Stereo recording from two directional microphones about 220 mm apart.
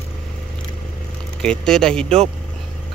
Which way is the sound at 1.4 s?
5° left (ahead or behind).